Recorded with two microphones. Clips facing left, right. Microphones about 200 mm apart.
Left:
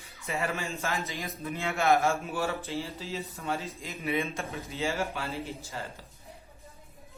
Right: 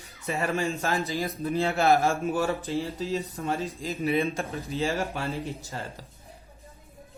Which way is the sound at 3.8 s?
35° right (ahead or behind).